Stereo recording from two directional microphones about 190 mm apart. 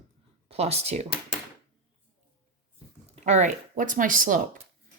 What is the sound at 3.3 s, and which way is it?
Speech, 40° right (ahead or behind).